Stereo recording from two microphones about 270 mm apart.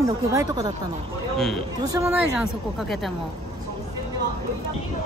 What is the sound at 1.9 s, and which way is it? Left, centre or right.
Speech, centre.